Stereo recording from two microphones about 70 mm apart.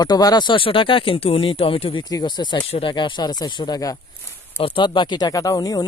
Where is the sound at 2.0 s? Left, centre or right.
Left.